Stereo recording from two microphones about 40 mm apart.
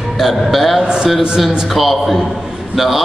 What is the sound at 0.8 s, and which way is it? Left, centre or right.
Speech, centre.